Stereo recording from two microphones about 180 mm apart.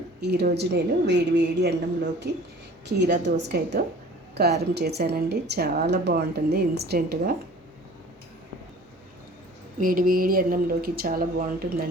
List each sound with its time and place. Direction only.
0.2 s a woman's voice: 65° right (ahead or behind)
9.8 s speech: 50° right (ahead or behind)